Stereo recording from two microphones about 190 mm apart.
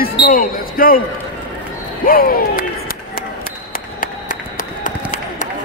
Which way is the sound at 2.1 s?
50° left (ahead or behind).